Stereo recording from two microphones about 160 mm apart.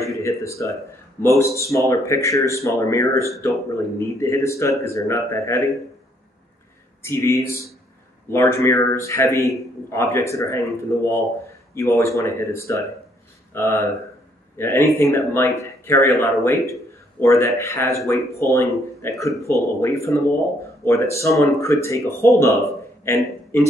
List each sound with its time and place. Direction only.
0.2 s speech: 20° left (ahead or behind)
7.0 s speech: 15° left (ahead or behind)
23.0 s a sound: 15° left (ahead or behind)